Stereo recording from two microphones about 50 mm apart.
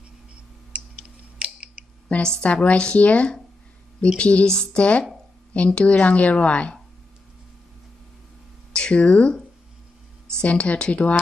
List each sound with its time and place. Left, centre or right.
1.0 s a sound: centre
2.2 s speech: left
8.7 s speech: left